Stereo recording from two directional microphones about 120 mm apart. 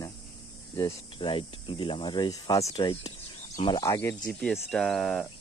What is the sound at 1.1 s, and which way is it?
Speech, 45° left (ahead or behind).